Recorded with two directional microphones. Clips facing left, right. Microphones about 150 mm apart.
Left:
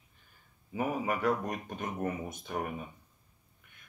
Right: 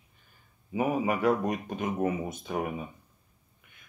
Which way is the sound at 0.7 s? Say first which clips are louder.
Right 5 dB; 10° right (ahead or behind).